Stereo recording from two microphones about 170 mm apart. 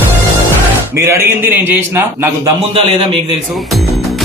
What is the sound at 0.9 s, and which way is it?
A man's voice, 15° right (ahead or behind).